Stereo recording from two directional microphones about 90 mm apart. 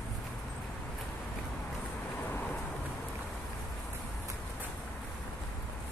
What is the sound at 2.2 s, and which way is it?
Vehicle, 20° left (ahead or behind).